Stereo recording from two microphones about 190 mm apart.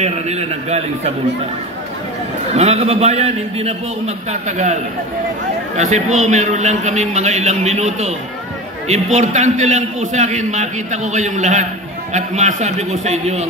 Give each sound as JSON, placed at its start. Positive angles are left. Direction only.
{"t": 0.0, "sound": "a man's voice", "side_deg": -35}
{"t": 2.5, "sound": "a man's voice", "side_deg": -35}
{"t": 5.8, "sound": "a man's voice", "side_deg": -40}